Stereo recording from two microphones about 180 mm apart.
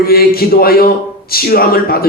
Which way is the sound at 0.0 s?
55° left (ahead or behind).